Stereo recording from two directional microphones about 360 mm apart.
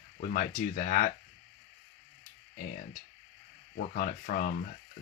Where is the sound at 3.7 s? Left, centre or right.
Left.